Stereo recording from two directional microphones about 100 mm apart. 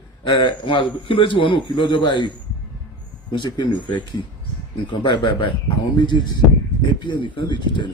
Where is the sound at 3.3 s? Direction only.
50° left (ahead or behind).